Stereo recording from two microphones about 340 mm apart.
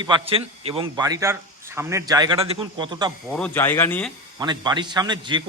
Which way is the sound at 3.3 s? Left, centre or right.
Centre.